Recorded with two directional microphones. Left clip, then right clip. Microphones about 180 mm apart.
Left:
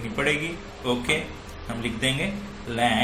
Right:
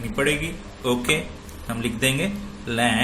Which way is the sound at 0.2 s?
30° right (ahead or behind).